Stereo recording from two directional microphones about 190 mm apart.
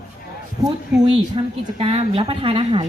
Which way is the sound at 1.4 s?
30° right (ahead or behind).